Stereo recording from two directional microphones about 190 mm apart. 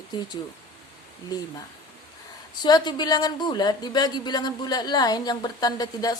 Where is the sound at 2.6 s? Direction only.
20° left (ahead or behind).